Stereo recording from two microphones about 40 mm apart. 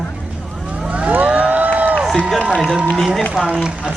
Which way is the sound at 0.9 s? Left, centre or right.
Right.